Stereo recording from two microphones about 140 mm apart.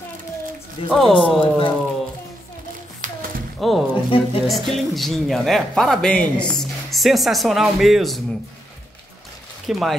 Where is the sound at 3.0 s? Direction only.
65° right (ahead or behind).